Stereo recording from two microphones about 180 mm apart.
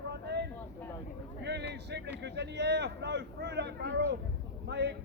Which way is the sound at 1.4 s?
70° right (ahead or behind).